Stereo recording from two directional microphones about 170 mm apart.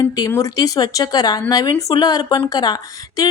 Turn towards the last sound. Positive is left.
turn(degrees=20)  # may be behind; listen again after turning